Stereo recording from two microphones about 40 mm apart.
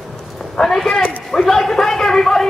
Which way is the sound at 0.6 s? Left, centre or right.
Centre.